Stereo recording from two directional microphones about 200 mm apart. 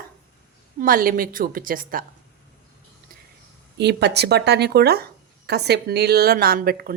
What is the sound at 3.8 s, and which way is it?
Speech, 55° right (ahead or behind).